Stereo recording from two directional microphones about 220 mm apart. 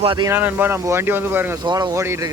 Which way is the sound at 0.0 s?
20° right (ahead or behind).